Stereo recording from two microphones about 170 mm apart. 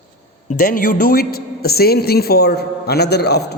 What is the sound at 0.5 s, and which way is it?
A man's voice, 55° left (ahead or behind).